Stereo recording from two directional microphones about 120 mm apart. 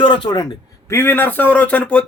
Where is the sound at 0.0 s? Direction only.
40° left (ahead or behind).